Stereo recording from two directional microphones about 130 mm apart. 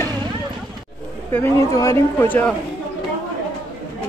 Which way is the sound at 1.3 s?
20° left (ahead or behind).